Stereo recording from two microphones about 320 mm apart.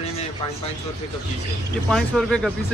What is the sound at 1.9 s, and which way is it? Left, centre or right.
Speech, centre.